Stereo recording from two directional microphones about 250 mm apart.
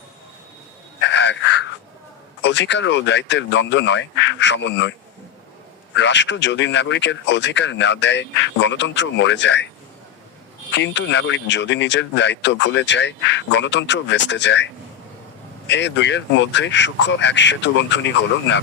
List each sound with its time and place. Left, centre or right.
1.0 s a sound: left
2.4 s speech: left
6.0 s speech: left
10.8 s speech: left